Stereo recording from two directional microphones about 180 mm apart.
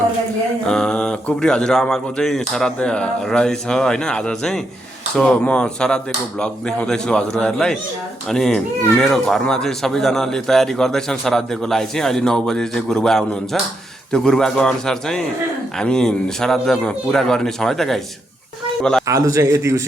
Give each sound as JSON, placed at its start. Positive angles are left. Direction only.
{"t": 0.7, "sound": "speech", "side_deg": 5}
{"t": 19.0, "sound": "a man's voice", "side_deg": -15}